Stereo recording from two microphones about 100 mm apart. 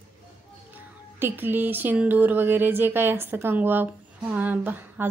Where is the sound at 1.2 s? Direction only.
20° right (ahead or behind).